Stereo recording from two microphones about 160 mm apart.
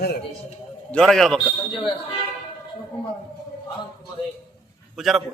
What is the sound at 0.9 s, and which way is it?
Speech, centre (ahead or behind).